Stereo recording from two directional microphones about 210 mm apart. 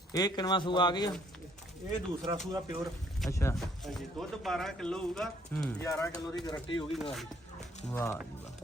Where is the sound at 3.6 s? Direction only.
Centre (ahead or behind); by 6.8 s 20° left (ahead or behind).